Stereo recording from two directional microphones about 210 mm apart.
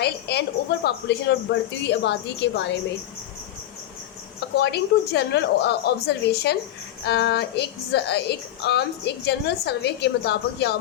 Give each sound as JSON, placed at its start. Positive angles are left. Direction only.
{"t": 0.0, "sound": "a woman's voice", "side_deg": 55}
{"t": 4.4, "sound": "a woman's voice", "side_deg": 50}